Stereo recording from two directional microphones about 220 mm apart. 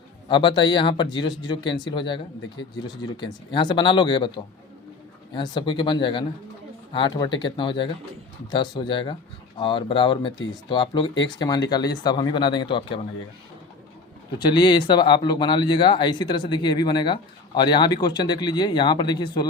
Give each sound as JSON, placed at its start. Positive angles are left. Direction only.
{"t": 0.3, "sound": "speech", "side_deg": 20}
{"t": 14.3, "sound": "speech", "side_deg": 20}